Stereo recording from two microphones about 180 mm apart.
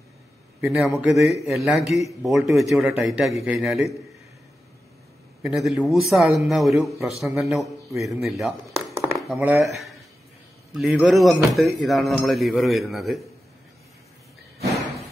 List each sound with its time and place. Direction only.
0.7 s speech: centre (ahead or behind)
5.4 s speech: centre (ahead or behind)
8.9 s chop: 20° right (ahead or behind)
9.3 s speech: 10° right (ahead or behind)
10.7 s speech: centre (ahead or behind)